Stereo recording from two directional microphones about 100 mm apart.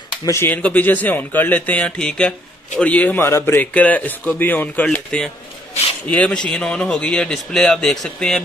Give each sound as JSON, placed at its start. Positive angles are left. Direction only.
{"t": 0.4, "sound": "speech", "side_deg": 15}